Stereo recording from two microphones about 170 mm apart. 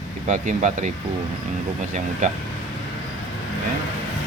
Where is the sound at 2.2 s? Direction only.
45° right (ahead or behind).